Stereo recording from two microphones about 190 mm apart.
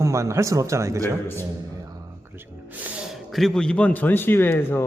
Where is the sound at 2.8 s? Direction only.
5° right (ahead or behind); by 4.8 s 10° left (ahead or behind).